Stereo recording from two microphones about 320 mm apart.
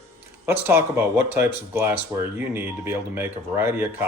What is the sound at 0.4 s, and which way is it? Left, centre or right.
Speech, centre.